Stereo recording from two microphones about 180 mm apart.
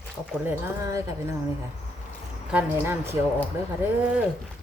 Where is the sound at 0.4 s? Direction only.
10° right (ahead or behind).